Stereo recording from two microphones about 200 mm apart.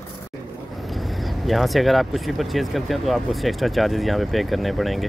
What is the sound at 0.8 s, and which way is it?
Speech, centre (ahead or behind).